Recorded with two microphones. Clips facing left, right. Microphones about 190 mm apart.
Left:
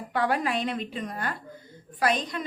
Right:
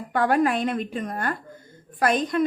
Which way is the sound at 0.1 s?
50° right (ahead or behind).